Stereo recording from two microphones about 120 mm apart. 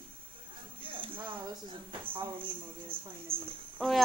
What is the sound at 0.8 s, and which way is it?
Music, 45° right (ahead or behind).